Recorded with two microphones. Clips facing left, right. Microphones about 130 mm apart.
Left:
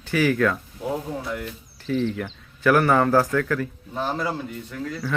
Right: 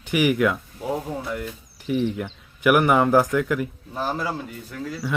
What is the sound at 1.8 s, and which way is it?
Speech, 15° right (ahead or behind).